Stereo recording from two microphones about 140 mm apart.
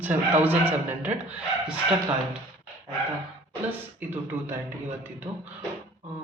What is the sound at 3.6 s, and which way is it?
A man's voice, 15° right (ahead or behind).